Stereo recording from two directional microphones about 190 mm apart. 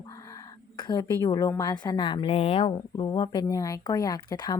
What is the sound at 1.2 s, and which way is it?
A woman's voice, 20° left (ahead or behind).